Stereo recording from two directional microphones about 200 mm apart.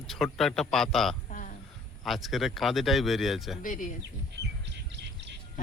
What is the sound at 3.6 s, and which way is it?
Speech, 40° left (ahead or behind).